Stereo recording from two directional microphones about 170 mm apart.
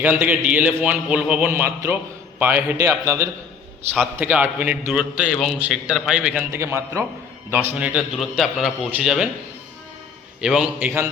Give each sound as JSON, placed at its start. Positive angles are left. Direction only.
{"t": 0.0, "sound": "a man's voice", "side_deg": -10}
{"t": 4.2, "sound": "a man's voice", "side_deg": -10}
{"t": 10.4, "sound": "a man's voice", "side_deg": -5}